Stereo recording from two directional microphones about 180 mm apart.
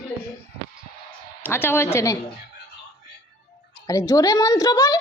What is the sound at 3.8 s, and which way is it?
Speech, 15° left (ahead or behind).